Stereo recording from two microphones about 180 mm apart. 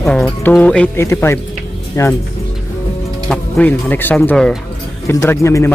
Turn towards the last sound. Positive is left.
turn(degrees=15)  # may be behind; listen again after turning